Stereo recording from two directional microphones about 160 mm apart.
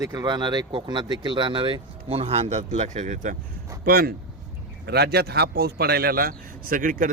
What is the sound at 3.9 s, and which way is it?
Speech, 70° right (ahead or behind).